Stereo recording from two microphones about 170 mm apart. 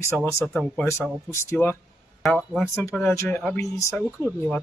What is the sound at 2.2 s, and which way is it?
Speech, centre (ahead or behind).